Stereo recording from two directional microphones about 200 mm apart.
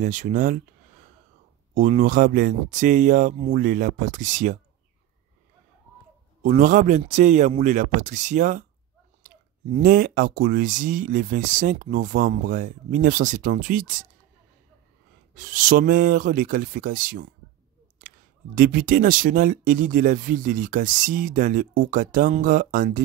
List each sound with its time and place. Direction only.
0.0 s speech: 40° right (ahead or behind)
1.7 s speech: 35° right (ahead or behind)
6.4 s speech: 40° right (ahead or behind)
15.3 s speech: 40° right (ahead or behind)